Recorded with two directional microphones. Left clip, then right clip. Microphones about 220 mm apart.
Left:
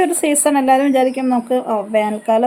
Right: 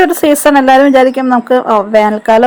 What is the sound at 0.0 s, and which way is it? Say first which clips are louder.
Speech: right 8 dB; 20° right (ahead or behind).